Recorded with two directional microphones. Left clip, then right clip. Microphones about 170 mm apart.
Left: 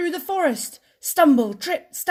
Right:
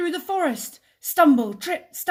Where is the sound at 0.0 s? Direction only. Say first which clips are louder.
Left 2 dB; 30° left (ahead or behind).